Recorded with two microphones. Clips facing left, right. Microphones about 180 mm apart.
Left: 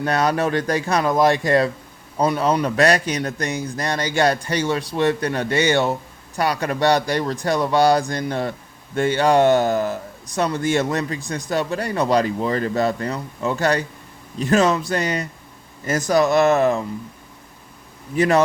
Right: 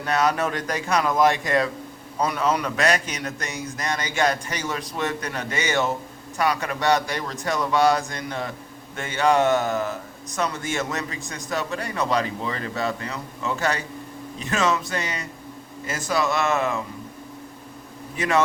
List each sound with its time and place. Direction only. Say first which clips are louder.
0.0 s speech: left 3 dB; 35° left (ahead or behind)
18.2 s speech: left 5 dB; 35° left (ahead or behind)